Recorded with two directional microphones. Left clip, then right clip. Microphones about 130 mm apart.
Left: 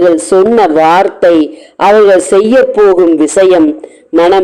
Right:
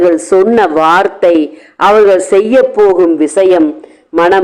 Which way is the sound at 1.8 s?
15° left (ahead or behind).